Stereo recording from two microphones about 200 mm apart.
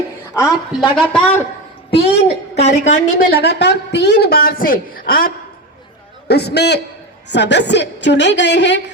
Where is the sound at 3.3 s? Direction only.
55° left (ahead or behind).